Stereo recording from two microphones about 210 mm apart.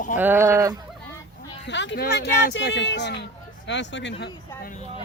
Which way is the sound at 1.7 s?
55° left (ahead or behind).